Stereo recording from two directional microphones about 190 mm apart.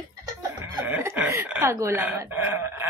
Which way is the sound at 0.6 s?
15° right (ahead or behind).